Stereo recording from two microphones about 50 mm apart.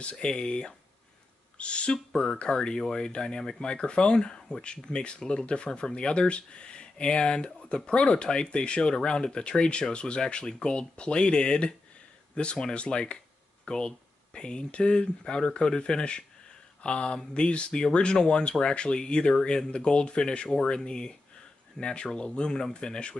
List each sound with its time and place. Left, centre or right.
0.0 s speech: centre